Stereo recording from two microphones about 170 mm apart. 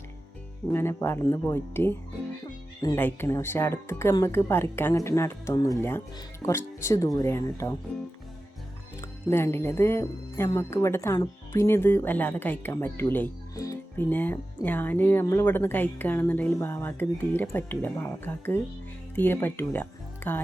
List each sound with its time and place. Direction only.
0.7 s speech: 15° left (ahead or behind)
9.0 s speech: 15° left (ahead or behind)